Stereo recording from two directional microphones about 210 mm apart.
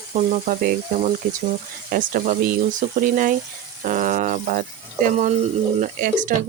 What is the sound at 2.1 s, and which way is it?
Speech, 40° right (ahead or behind).